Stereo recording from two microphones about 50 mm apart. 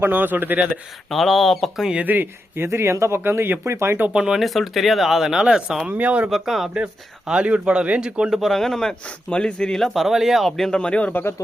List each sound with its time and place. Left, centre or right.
0.0 s speech: right
1.1 s speech: centre
2.1 s speech: right
2.6 s speech: right
4.1 s speech: centre
4.4 s speech: centre
5.9 s a man's voice: right
6.3 s speech: centre
7.3 s a man's voice: right
8.3 s a man's voice: centre
9.7 s speech: centre
10.7 s speech: left
11.1 s speech: left